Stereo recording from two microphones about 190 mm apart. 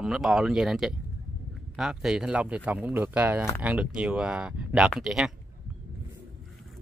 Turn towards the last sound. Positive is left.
turn(degrees=0)  # may be behind; listen again after turning